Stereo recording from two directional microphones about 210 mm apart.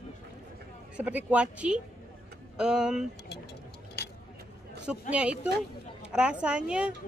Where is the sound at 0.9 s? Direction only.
5° right (ahead or behind).